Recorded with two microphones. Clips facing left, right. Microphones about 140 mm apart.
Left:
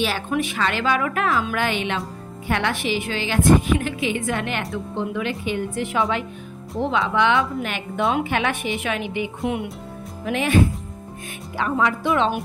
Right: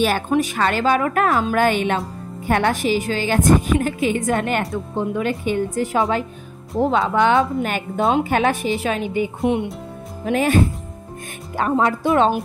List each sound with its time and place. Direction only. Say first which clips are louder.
0.3 s a woman's voice: right 4 dB; 40° right (ahead or behind)
9.4 s speech: right 6 dB; 25° right (ahead or behind)
10.2 s speech: right 3 dB; 40° right (ahead or behind)
11.7 s speech: right 3 dB; 40° right (ahead or behind)